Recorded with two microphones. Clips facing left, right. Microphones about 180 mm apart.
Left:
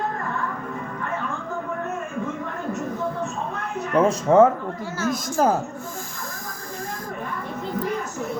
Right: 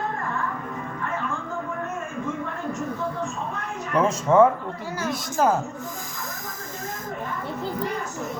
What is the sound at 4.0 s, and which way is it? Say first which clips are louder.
A woman's voice: left 2 dB; 35° left (ahead or behind).